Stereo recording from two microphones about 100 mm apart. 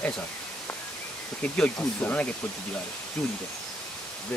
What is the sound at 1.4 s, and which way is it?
Speech, 10° left (ahead or behind).